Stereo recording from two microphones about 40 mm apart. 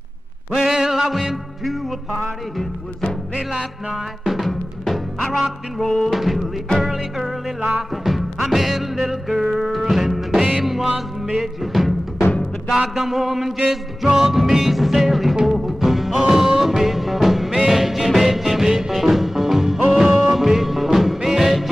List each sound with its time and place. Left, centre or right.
0.5 s a sound: centre
1.1 s music: centre
3.9 s music: centre
6.1 s music: centre
12.9 s a sound: centre
13.7 s music: centre
19.9 s music: centre
20.3 s music: centre